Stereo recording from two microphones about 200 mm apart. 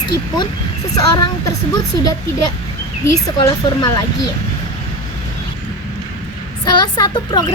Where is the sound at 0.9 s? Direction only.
20° left (ahead or behind).